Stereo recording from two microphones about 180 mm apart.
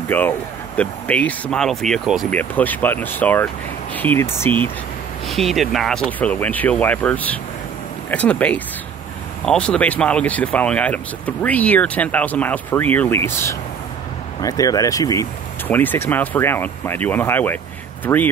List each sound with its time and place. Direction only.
0.1 s speech: 10° left (ahead or behind)
5.3 s speech: centre (ahead or behind)